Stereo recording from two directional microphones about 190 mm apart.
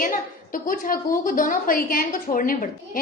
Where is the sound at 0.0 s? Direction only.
45° left (ahead or behind).